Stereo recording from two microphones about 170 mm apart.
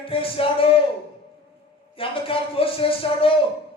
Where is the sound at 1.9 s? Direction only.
30° left (ahead or behind).